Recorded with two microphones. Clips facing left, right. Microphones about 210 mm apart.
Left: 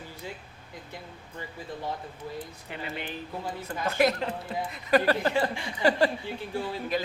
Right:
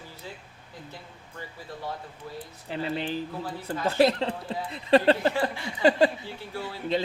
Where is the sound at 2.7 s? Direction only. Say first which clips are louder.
Right 8 dB; 30° right (ahead or behind).